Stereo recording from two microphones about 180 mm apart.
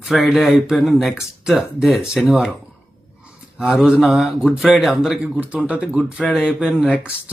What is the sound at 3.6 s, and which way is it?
Speech, centre (ahead or behind).